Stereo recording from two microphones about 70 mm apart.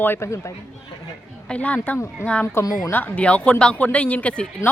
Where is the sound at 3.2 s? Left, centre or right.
Centre.